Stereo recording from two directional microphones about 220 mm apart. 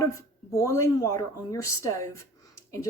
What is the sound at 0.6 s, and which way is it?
Speech, 15° left (ahead or behind).